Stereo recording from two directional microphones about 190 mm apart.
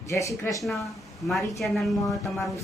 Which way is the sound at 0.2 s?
15° left (ahead or behind).